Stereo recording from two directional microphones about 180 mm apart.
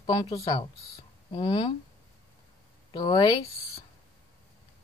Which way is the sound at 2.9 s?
25° left (ahead or behind).